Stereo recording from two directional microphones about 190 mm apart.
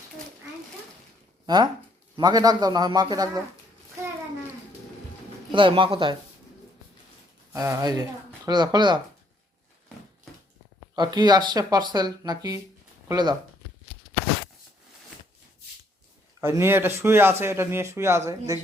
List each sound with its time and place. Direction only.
1.5 s speech: 20° right (ahead or behind)
5.5 s speech: 25° right (ahead or behind)
7.5 s speech: 15° right (ahead or behind)
10.9 s speech: 20° right (ahead or behind)
16.4 s speech: 15° right (ahead or behind)